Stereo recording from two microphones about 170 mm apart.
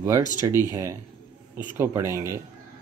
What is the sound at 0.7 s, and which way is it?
Speech, 15° right (ahead or behind).